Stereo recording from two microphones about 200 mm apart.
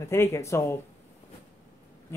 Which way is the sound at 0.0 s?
15° left (ahead or behind).